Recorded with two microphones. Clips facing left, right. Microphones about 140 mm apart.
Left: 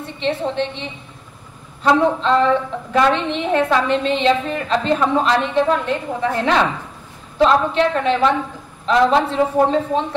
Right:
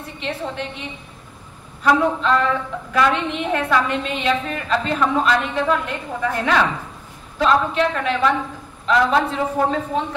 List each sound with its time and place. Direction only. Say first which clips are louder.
0.2 s a woman's voice: left 7 dB; 30° left (ahead or behind)